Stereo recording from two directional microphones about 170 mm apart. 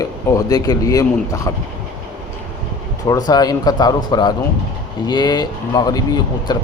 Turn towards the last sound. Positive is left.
turn(degrees=25)  # may be behind; listen again after turning